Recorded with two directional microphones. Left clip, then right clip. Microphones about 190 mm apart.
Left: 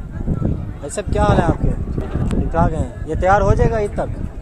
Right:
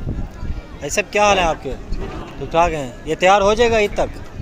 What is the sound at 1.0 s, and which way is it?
Speech, 10° right (ahead or behind).